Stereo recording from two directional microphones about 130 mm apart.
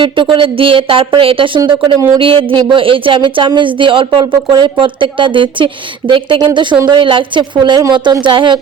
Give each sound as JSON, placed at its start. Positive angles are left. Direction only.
{"t": 0.0, "sound": "speech", "side_deg": -40}